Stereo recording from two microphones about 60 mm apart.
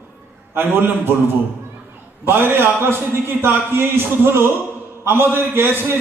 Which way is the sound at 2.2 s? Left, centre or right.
Right.